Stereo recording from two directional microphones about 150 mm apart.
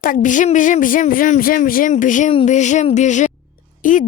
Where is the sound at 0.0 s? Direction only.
60° left (ahead or behind).